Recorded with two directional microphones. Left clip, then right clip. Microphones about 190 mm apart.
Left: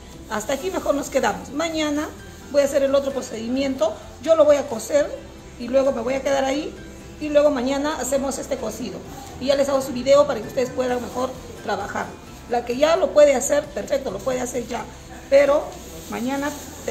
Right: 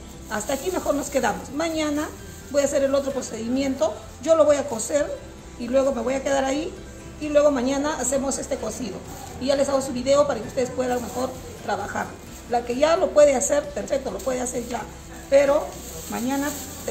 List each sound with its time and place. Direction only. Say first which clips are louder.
0.3 s a woman's voice: left 1 dB; 20° left (ahead or behind)